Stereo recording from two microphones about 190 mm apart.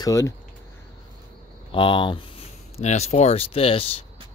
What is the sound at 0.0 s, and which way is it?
Speech, 15° left (ahead or behind).